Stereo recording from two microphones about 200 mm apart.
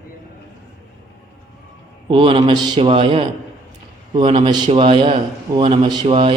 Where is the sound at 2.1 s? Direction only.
25° right (ahead or behind).